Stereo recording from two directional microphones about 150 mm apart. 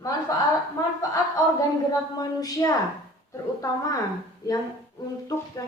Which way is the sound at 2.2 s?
25° left (ahead or behind).